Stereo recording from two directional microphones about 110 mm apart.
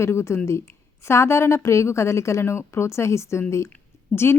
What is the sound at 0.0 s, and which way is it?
A woman's voice, 25° left (ahead or behind).